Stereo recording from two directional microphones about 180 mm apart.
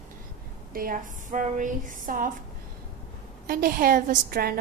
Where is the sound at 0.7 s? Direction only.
50° right (ahead or behind).